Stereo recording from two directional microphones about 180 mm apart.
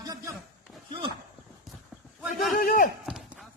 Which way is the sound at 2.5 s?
55° left (ahead or behind).